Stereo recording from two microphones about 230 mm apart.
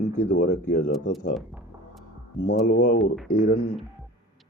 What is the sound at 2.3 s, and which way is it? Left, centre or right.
Speech, left.